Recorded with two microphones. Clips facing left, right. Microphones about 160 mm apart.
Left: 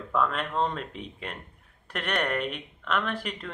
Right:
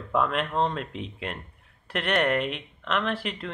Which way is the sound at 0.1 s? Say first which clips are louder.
Right 2 dB; 15° right (ahead or behind).